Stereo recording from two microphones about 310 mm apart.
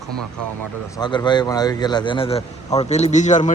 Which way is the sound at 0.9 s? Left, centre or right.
Centre.